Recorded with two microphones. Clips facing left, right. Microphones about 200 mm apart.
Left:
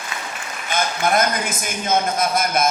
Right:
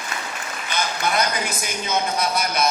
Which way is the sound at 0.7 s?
50° left (ahead or behind).